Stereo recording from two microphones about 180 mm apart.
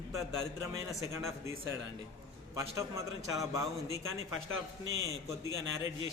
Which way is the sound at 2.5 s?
15° right (ahead or behind).